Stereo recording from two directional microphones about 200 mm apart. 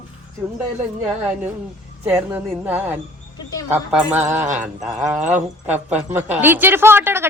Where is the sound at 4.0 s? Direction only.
10° right (ahead or behind).